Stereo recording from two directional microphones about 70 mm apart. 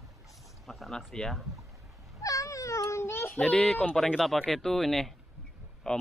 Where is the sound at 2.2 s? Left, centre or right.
Left.